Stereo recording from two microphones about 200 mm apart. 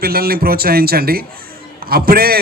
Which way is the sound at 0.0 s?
50° right (ahead or behind).